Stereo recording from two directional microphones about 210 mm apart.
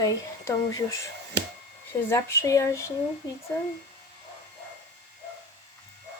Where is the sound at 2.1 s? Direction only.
15° left (ahead or behind).